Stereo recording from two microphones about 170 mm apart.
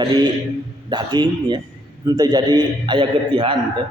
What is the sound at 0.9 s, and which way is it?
A man's voice, 25° right (ahead or behind).